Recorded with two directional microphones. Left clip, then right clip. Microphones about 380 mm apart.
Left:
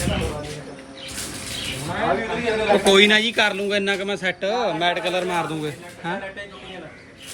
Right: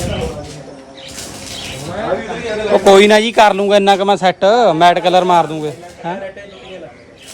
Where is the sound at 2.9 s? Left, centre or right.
Centre.